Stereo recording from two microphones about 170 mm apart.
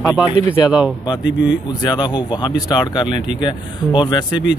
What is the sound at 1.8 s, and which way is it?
Speech, 25° left (ahead or behind).